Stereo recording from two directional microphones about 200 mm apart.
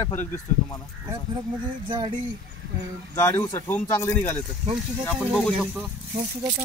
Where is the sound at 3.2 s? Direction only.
15° left (ahead or behind).